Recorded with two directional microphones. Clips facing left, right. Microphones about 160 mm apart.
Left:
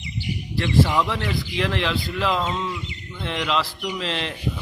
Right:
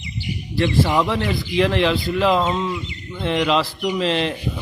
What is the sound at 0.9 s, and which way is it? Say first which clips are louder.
Speech: right 4 dB; 30° right (ahead or behind).